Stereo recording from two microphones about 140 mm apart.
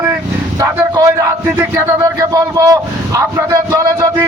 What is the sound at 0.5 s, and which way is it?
Music, 20° right (ahead or behind).